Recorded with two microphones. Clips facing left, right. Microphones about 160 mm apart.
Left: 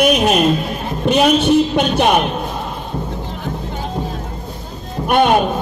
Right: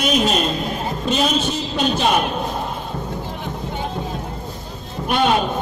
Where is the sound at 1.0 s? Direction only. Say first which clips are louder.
Left 8 dB; 65° left (ahead or behind).